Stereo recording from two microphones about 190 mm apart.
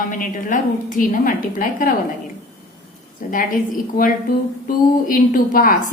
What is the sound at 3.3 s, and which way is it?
A woman's voice, 45° left (ahead or behind).